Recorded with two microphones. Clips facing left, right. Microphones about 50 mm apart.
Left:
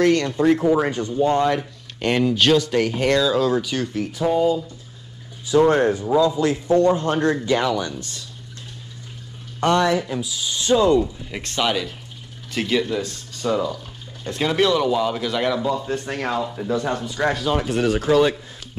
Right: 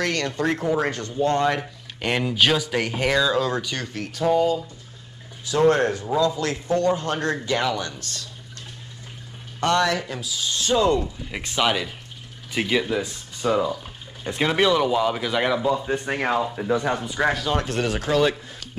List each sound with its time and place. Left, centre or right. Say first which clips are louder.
0.0 s speech: left 7 dB; centre
1.4 s speech: left 2 dB; centre
5.6 s a man's voice: left 2 dB; centre
7.6 s speech: left 3 dB; centre
9.6 s a man's voice: left 3 dB; centre
10.0 s speech: left 3 dB; centre
11.0 s speech: left 5 dB; centre
17.2 s speech: left 2 dB; centre